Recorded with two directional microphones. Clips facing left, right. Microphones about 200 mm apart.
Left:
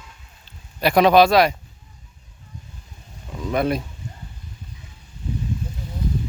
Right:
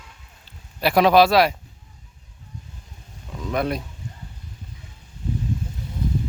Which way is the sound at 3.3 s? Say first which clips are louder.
Left 3 dB; centre (ahead or behind).